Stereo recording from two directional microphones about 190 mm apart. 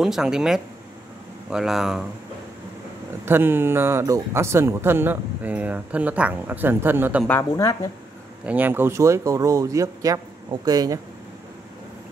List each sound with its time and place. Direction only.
0.0 s speech: centre (ahead or behind)
3.3 s speech: 10° right (ahead or behind)
7.2 s a woman's voice: 15° left (ahead or behind)
8.5 s speech: 10° right (ahead or behind)